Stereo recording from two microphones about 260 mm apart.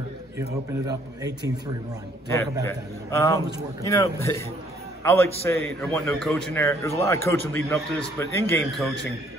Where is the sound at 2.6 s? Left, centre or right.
Centre.